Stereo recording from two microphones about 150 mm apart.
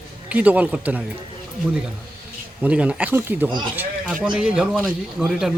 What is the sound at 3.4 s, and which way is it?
Speech, 30° right (ahead or behind).